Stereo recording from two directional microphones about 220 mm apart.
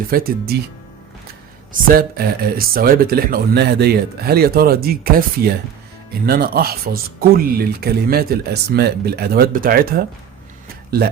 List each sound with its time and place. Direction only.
0.1 s speech: 45° right (ahead or behind)
1.7 s speech: 40° right (ahead or behind)